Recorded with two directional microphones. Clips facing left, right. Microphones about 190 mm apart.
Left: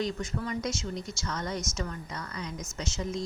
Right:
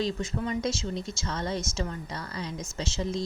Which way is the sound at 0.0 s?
25° right (ahead or behind).